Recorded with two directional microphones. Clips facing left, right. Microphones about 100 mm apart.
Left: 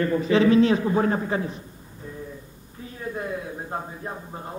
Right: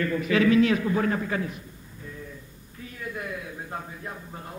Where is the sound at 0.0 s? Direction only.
30° left (ahead or behind).